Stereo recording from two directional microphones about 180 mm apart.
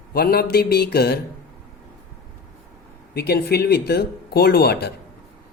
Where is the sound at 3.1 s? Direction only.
60° left (ahead or behind).